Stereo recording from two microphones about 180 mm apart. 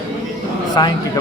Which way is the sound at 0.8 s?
25° left (ahead or behind).